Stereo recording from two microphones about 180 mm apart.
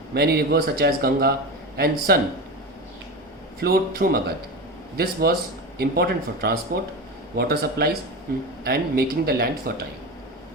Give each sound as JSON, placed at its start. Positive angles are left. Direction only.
{"t": 0.1, "sound": "speech", "side_deg": -60}
{"t": 3.6, "sound": "speech", "side_deg": -55}